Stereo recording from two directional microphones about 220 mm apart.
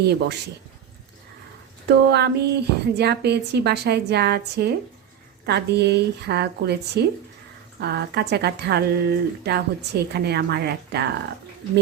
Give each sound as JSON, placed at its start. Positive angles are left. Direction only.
{"t": 0.0, "sound": "speech", "side_deg": -50}
{"t": 1.9, "sound": "speech", "side_deg": -50}